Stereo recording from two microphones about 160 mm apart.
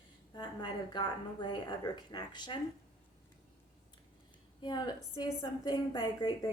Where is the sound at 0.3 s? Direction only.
30° left (ahead or behind).